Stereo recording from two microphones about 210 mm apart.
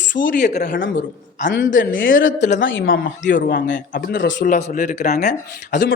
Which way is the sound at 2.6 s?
70° left (ahead or behind).